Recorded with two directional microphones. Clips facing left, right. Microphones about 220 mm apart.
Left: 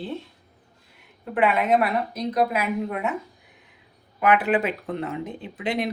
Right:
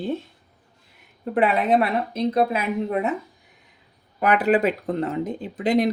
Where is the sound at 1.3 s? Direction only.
35° right (ahead or behind).